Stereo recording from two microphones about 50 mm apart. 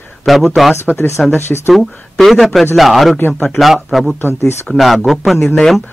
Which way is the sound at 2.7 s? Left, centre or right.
Centre.